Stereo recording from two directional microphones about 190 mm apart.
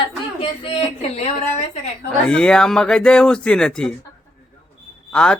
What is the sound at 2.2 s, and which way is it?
Speech, 5° left (ahead or behind).